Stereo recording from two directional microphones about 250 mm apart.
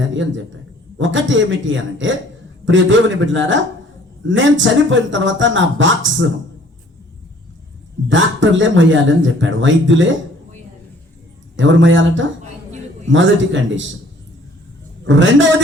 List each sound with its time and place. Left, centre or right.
0.1 s a man's voice: right
8.1 s speech: right
11.5 s speech: right
15.0 s speech: right